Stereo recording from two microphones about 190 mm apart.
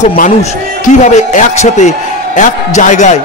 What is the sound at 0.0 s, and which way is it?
A man's voice, 40° left (ahead or behind).